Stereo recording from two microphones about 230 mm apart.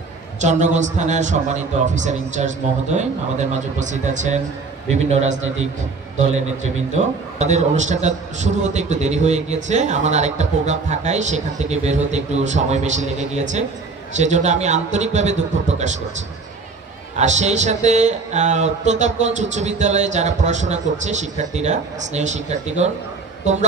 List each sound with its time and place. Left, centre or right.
0.4 s a man's voice: right
7.0 s a man's voice: right
17.2 s a man's voice: right